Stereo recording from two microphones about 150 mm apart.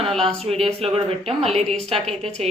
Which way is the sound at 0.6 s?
40° right (ahead or behind).